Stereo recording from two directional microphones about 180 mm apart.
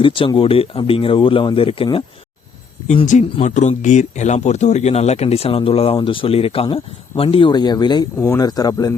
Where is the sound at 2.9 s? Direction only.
40° left (ahead or behind).